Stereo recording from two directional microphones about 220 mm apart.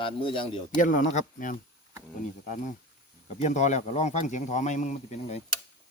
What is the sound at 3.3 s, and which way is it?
Speech, 30° left (ahead or behind).